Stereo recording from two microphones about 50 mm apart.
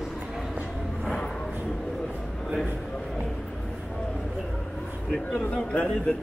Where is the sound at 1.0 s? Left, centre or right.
Centre.